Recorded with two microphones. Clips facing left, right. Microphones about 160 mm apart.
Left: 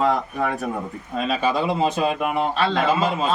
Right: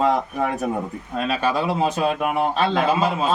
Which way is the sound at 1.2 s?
5° right (ahead or behind).